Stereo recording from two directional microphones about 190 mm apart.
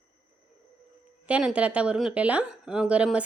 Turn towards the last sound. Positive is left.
turn(degrees=-5)  # may be behind; listen again after turning